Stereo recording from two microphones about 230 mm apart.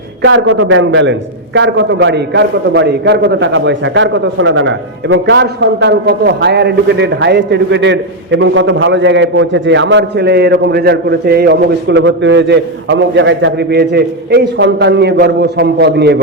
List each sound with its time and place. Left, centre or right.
0.2 s a man's voice: right